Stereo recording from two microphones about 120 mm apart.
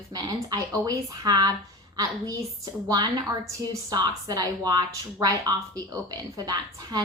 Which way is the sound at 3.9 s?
35° right (ahead or behind).